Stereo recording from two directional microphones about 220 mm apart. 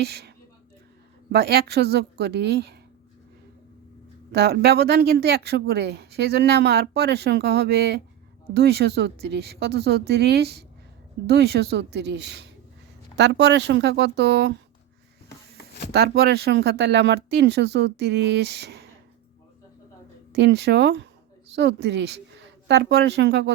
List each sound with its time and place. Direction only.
0.0 s speech: 45° right (ahead or behind)
4.3 s speech: 50° right (ahead or behind)
15.9 s speech: 45° right (ahead or behind)
20.3 s a woman's voice: 50° right (ahead or behind)